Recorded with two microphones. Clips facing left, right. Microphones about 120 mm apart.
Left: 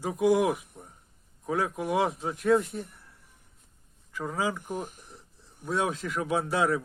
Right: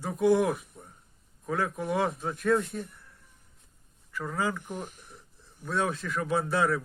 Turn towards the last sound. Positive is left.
turn(degrees=15)  # may be behind; listen again after turning